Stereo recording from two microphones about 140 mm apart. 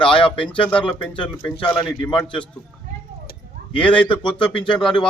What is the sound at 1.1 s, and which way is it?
A man's voice, 40° left (ahead or behind).